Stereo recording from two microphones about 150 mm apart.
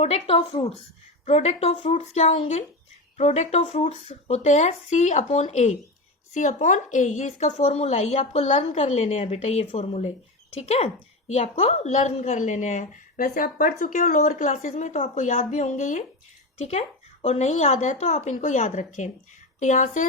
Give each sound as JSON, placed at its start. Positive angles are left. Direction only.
{"t": 0.0, "sound": "a woman's voice", "side_deg": 45}